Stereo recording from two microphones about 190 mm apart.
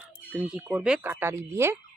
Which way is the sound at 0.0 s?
5° right (ahead or behind).